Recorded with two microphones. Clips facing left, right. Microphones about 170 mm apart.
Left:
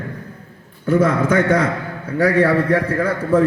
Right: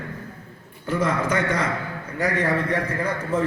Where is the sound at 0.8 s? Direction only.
55° left (ahead or behind).